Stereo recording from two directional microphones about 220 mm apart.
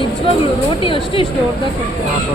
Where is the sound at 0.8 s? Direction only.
25° left (ahead or behind).